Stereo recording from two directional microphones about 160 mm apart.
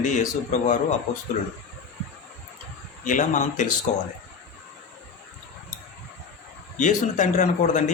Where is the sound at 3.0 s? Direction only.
55° left (ahead or behind).